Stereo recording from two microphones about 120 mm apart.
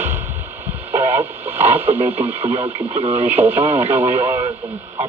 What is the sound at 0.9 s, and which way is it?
Speech, 20° right (ahead or behind).